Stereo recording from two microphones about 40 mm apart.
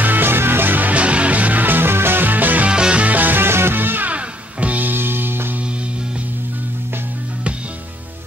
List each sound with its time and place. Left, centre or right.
0.0 s music: right
0.9 s music: right
2.2 s music: right
2.7 s music: right
3.0 s music: right
3.4 s music: right
4.1 s music: right
4.8 s music: right